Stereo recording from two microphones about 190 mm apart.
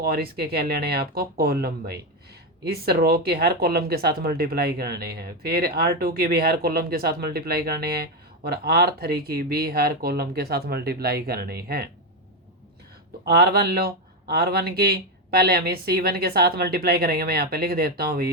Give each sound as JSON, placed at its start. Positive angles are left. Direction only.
{"t": 0.0, "sound": "speech", "side_deg": -55}
{"t": 13.2, "sound": "speech", "side_deg": -55}